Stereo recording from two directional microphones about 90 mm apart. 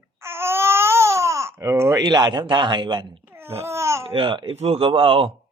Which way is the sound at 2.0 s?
55° right (ahead or behind).